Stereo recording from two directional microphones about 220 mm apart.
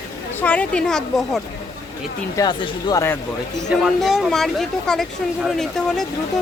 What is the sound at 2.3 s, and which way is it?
Speech, 15° left (ahead or behind).